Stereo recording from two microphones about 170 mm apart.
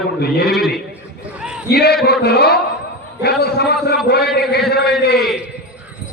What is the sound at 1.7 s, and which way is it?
A man's voice, 70° left (ahead or behind).